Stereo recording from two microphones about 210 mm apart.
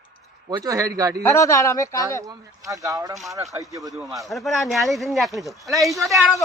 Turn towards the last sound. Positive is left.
turn(degrees=0)  # may be behind; listen again after turning